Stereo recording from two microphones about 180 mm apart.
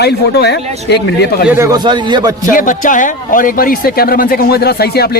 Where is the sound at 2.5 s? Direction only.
45° left (ahead or behind).